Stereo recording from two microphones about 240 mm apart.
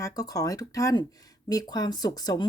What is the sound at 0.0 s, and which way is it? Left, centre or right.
Speech, centre.